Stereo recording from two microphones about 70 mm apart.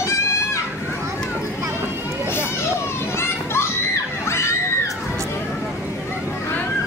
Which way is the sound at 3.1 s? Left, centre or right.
Left.